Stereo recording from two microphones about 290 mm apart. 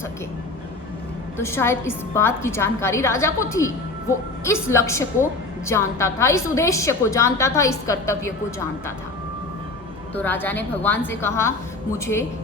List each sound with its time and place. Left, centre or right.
1.4 s a woman's voice: centre
10.2 s a woman's voice: centre